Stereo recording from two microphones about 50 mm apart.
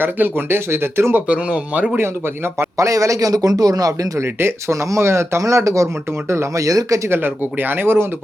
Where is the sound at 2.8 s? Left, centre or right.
Right.